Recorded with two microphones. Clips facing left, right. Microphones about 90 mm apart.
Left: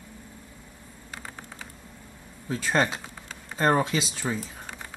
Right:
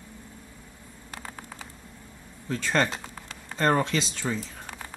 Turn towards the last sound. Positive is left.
turn(degrees=10)  # may be behind; listen again after turning